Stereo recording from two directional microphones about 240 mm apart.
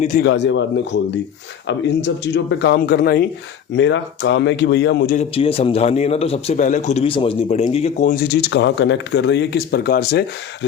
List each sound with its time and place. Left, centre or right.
0.0 s a man's voice: left
0.3 s speech: left
5.1 s a man's voice: left